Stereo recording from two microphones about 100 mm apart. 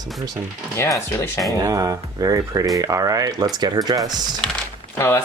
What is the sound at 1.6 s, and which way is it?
Speech, 35° right (ahead or behind).